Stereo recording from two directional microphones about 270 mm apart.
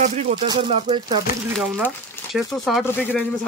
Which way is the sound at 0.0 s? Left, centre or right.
Right.